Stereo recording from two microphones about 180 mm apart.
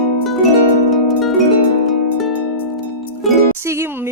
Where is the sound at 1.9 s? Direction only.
Centre (ahead or behind).